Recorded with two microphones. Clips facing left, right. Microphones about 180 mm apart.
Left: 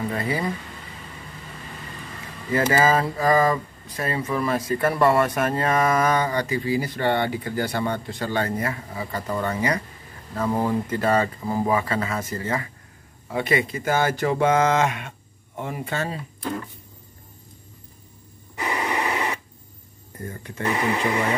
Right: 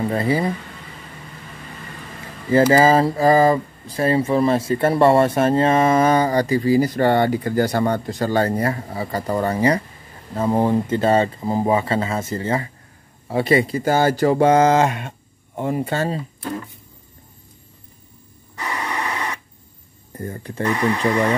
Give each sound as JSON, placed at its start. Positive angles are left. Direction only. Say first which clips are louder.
{"t": 0.1, "sound": "speech", "louder": "right 6 dB", "side_deg": -30}
{"t": 2.5, "sound": "speech", "louder": "right 6 dB", "side_deg": -30}
{"t": 18.6, "sound": "radio", "louder": "left 1 dB", "side_deg": 15}
{"t": 20.2, "sound": "speech", "louder": "right 6 dB", "side_deg": -35}
{"t": 20.6, "sound": "speech", "louder": "right 3 dB", "side_deg": 20}
{"t": 21.0, "sound": "speech", "louder": "right 5 dB", "side_deg": -35}